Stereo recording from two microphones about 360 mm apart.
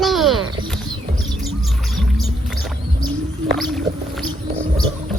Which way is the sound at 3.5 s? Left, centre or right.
Centre.